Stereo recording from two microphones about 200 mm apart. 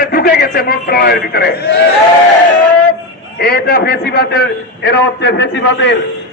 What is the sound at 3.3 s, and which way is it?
A man's voice, 50° left (ahead or behind).